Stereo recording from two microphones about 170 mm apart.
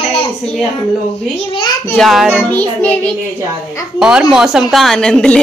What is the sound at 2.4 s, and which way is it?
Child singing, 10° left (ahead or behind).